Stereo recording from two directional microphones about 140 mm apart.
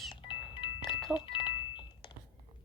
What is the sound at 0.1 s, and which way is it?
Music, 35° left (ahead or behind).